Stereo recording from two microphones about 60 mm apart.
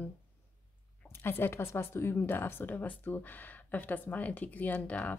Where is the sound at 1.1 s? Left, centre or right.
Left.